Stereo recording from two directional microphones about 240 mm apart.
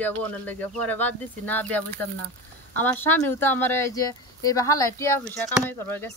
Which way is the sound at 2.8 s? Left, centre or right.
Centre.